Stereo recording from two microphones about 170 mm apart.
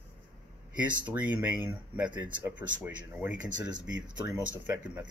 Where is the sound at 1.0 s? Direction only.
10° right (ahead or behind).